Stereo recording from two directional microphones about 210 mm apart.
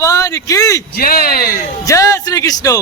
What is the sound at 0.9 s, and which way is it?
Speech, 45° left (ahead or behind).